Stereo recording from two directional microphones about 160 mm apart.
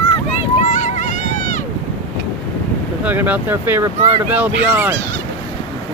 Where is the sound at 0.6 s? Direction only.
50° left (ahead or behind).